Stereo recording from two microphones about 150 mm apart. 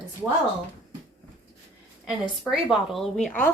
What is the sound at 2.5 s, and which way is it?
Speech, centre (ahead or behind).